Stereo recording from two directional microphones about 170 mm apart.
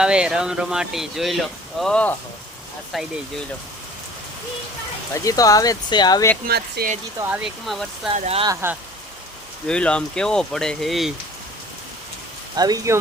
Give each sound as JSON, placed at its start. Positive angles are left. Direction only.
{"t": 0.0, "sound": "speech", "side_deg": -5}
{"t": 5.1, "sound": "speech", "side_deg": 20}
{"t": 6.5, "sound": "speech", "side_deg": -65}
{"t": 7.3, "sound": "speech", "side_deg": -5}
{"t": 8.1, "sound": "speech", "side_deg": -40}
{"t": 9.6, "sound": "speech", "side_deg": 5}
{"t": 12.5, "sound": "speech", "side_deg": -20}